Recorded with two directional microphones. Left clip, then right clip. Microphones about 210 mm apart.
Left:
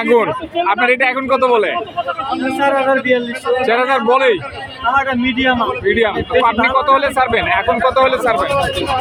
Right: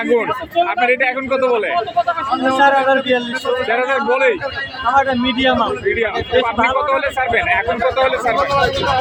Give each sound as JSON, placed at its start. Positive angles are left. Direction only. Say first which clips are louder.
{"t": 0.1, "sound": "a man's voice", "louder": "left 1 dB", "side_deg": 25}
{"t": 2.6, "sound": "a man's voice", "louder": "right 1 dB", "side_deg": 0}
{"t": 3.7, "sound": "a man's voice", "louder": "left 4 dB", "side_deg": 20}
{"t": 4.9, "sound": "a man's voice", "louder": "right 2 dB", "side_deg": 0}
{"t": 5.9, "sound": "a man's voice", "louder": "left 6 dB", "side_deg": 20}